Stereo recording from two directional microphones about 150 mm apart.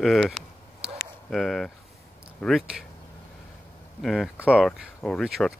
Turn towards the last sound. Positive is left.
turn(degrees=5)  # may be behind; listen again after turning